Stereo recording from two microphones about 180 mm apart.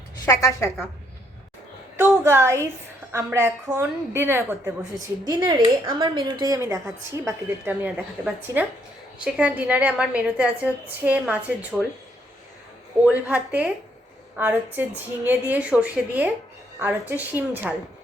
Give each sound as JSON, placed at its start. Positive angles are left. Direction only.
{"t": 0.3, "sound": "a woman's voice", "side_deg": 15}
{"t": 2.0, "sound": "a woman's voice", "side_deg": -15}
{"t": 3.0, "sound": "a sound", "side_deg": -10}
{"t": 3.3, "sound": "a woman's voice", "side_deg": -15}
{"t": 13.1, "sound": "a woman's voice", "side_deg": -10}